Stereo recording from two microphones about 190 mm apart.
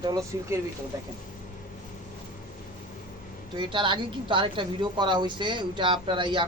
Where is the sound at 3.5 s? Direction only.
25° right (ahead or behind).